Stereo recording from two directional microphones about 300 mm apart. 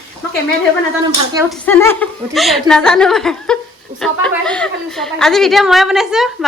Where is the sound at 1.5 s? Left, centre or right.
Centre.